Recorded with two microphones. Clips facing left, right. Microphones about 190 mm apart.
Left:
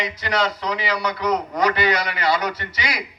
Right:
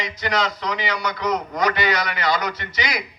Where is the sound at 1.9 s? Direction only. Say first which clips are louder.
Left 1 dB; 30° left (ahead or behind).